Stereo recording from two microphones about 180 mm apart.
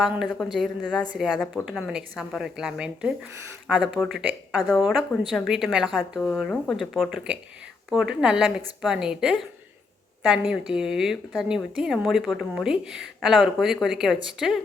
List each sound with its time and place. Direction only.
0.0 s a woman's voice: centre (ahead or behind)